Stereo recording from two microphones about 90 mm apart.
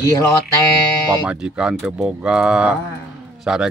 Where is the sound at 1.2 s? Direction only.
10° right (ahead or behind).